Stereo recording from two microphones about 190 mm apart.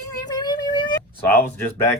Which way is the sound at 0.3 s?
20° left (ahead or behind).